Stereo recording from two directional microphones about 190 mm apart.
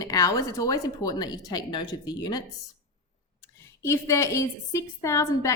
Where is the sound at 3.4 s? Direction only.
15° left (ahead or behind).